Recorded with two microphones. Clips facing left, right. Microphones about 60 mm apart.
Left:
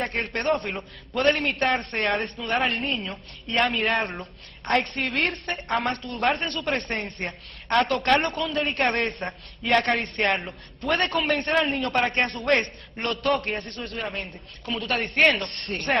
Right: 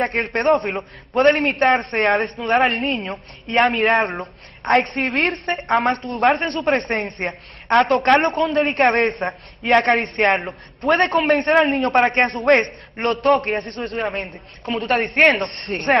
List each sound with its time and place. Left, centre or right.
0.0 s a woman's voice: right